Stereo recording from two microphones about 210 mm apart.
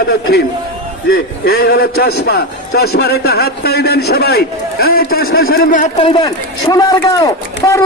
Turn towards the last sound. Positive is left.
turn(degrees=15)  # may be behind; listen again after turning